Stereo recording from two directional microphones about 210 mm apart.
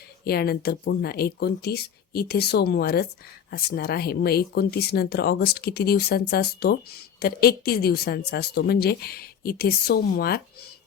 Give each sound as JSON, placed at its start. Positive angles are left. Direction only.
{"t": 0.3, "sound": "speech", "side_deg": 45}